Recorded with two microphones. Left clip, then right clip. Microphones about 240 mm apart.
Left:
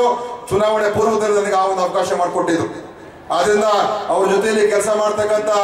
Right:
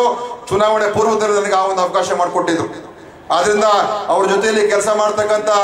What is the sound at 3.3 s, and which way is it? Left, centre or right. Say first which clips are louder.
A man's voice: right 2 dB; centre.